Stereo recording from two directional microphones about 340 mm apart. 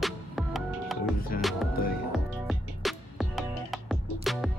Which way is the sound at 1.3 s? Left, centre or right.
Left.